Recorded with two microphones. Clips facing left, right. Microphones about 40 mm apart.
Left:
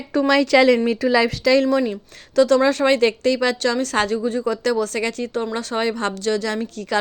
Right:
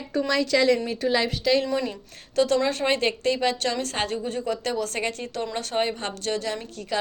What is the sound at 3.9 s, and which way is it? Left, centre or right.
Speech, left.